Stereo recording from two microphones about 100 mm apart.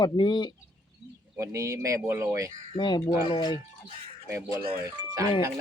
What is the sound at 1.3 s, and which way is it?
Speech, 30° right (ahead or behind).